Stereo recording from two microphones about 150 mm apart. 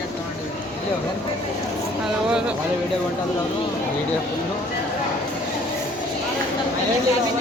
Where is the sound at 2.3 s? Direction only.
5° right (ahead or behind).